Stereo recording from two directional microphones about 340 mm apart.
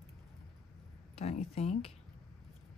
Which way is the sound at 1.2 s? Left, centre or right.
Centre.